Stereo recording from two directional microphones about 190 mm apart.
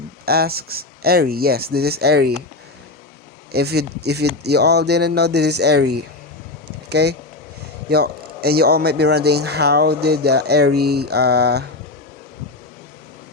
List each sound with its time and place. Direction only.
0.3 s speech: 55° right (ahead or behind)
3.5 s speech: 55° right (ahead or behind)